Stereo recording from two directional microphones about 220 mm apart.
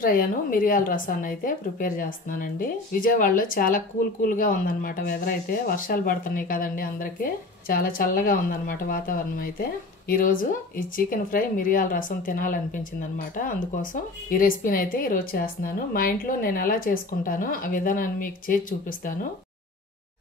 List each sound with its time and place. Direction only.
0.0 s speech: 40° left (ahead or behind)